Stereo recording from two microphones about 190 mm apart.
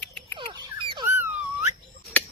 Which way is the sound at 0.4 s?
25° right (ahead or behind).